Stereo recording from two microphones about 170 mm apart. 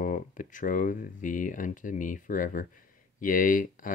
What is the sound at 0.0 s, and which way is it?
Speech, 50° left (ahead or behind).